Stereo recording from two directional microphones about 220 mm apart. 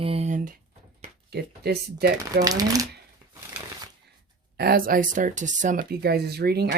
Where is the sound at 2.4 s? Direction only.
15° right (ahead or behind).